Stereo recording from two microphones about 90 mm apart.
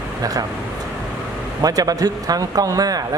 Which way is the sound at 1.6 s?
45° right (ahead or behind).